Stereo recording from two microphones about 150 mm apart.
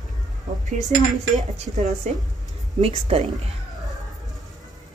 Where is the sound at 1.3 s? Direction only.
45° right (ahead or behind).